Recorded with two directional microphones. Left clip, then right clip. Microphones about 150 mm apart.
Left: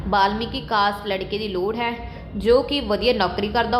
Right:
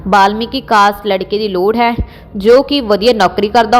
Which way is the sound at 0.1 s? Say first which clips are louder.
Right 10 dB; 45° right (ahead or behind).